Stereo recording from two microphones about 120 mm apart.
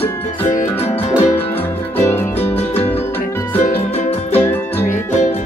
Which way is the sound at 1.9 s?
20° left (ahead or behind).